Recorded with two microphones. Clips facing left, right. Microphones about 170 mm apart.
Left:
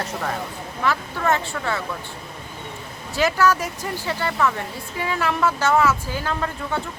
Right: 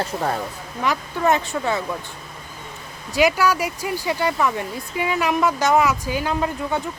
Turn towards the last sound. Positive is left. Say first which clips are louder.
# right 3 dB
turn(degrees=-15)  # may be behind; listen again after turning